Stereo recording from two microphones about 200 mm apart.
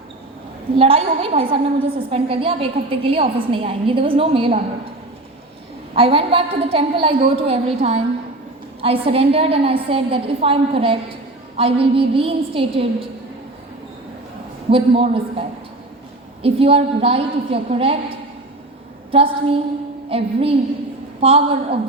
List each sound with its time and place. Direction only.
0.8 s a woman's voice: 30° right (ahead or behind)
5.9 s a woman's voice: 30° right (ahead or behind)
14.7 s a woman's voice: 30° right (ahead or behind)
19.1 s a woman's voice: 25° right (ahead or behind)